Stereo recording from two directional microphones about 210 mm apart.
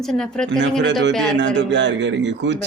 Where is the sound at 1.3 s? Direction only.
60° right (ahead or behind).